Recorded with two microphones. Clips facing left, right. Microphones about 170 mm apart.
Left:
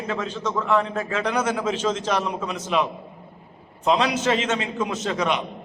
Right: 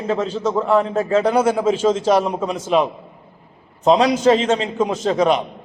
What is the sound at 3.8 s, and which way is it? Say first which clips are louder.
A man's voice: right 7 dB; 35° right (ahead or behind).